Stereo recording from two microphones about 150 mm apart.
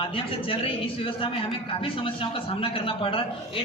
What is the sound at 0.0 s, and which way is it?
A man's voice, 35° left (ahead or behind).